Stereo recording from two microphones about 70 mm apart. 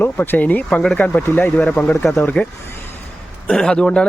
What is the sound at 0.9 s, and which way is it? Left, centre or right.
Speech, left.